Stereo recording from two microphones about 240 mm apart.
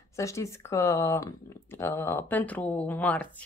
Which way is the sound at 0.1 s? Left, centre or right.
Centre.